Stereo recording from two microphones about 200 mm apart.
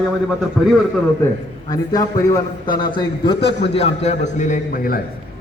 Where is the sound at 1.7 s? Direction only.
20° left (ahead or behind); by 5.0 s 45° left (ahead or behind).